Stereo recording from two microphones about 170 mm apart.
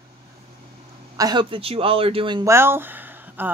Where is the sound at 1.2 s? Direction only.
25° right (ahead or behind).